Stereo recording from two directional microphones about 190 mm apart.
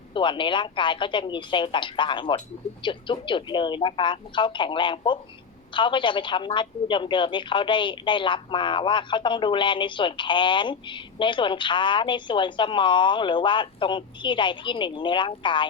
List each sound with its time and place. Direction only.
0.1 s a woman's voice: 25° left (ahead or behind)